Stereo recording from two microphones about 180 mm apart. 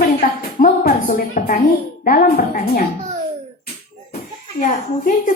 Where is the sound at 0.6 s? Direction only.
55° left (ahead or behind).